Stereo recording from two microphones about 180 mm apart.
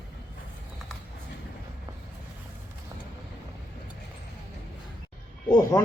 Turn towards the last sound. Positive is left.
turn(degrees=20)  # may be behind; listen again after turning